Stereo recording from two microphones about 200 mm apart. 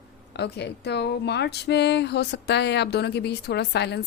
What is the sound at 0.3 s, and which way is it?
Speech, 55° left (ahead or behind).